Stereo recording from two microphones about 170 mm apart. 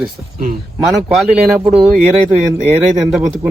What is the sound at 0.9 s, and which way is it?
Speech, 5° right (ahead or behind).